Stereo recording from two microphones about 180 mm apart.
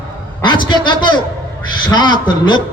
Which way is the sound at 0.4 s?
25° left (ahead or behind).